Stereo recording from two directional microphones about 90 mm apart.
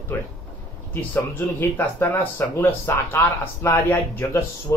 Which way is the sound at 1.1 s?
25° left (ahead or behind).